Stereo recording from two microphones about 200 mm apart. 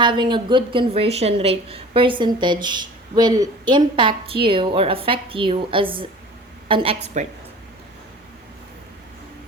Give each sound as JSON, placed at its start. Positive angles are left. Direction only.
{"t": 0.0, "sound": "a woman's voice", "side_deg": -25}